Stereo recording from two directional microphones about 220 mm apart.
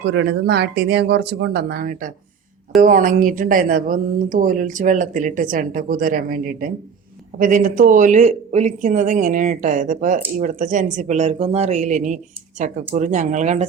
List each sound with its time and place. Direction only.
0.0 s speech: 50° right (ahead or behind); by 13.7 s 30° right (ahead or behind)